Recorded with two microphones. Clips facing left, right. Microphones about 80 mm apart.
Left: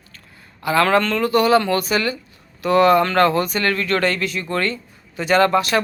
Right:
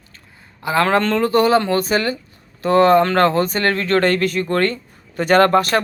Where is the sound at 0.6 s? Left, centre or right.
Right.